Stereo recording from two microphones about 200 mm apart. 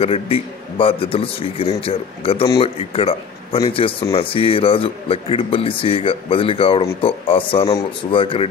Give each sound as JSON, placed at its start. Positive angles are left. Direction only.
{"t": 0.0, "sound": "a man's voice", "side_deg": 30}